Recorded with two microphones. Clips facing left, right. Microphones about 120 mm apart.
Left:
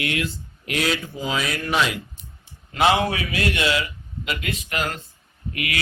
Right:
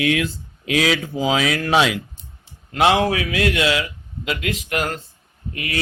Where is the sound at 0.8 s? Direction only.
90° right.